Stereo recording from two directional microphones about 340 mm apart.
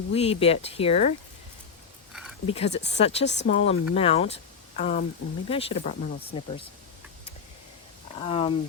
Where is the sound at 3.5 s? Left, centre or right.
Centre.